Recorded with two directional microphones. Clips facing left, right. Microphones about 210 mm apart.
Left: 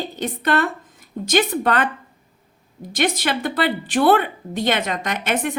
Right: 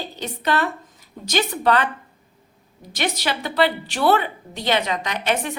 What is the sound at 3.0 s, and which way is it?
A woman's voice, 50° left (ahead or behind).